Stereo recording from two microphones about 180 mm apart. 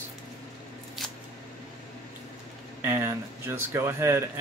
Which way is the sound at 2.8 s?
15° right (ahead or behind).